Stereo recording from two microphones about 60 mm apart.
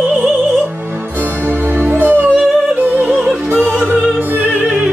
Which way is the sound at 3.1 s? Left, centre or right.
Right.